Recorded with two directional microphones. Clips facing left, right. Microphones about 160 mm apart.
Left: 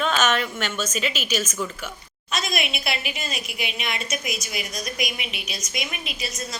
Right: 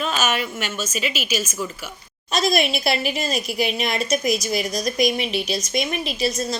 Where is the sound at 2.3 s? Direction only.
35° right (ahead or behind).